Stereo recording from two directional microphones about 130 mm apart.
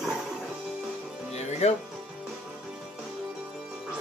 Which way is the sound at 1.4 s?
55° left (ahead or behind).